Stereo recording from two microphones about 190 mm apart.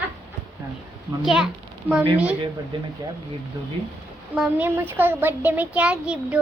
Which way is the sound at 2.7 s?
25° right (ahead or behind).